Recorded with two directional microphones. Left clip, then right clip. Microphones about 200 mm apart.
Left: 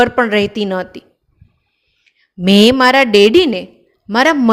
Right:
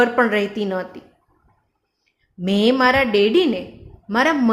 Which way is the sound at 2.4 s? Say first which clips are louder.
Left 7 dB; 45° left (ahead or behind).